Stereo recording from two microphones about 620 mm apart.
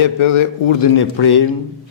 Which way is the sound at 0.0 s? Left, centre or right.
Left.